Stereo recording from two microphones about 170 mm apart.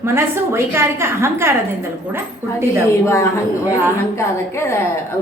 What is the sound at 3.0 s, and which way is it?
Speech, 15° left (ahead or behind).